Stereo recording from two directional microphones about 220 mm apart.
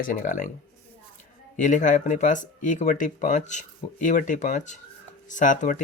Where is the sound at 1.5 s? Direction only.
35° left (ahead or behind).